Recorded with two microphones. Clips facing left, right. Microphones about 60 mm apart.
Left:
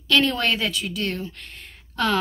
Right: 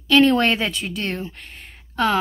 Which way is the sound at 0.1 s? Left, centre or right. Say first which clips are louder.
Right 5 dB; right.